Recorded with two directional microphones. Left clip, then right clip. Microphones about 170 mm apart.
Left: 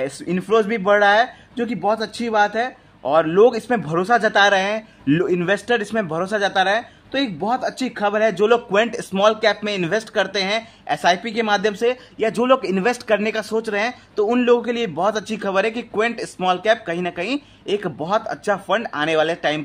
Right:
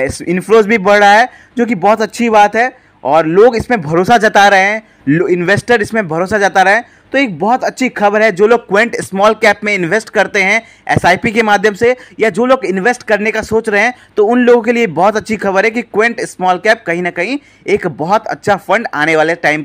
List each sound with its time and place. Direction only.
0.0 s a man's voice: 30° right (ahead or behind)
4.0 s a man's voice: 35° right (ahead or behind)